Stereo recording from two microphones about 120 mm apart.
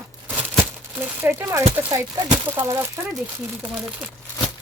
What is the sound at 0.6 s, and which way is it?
Speech, 15° right (ahead or behind).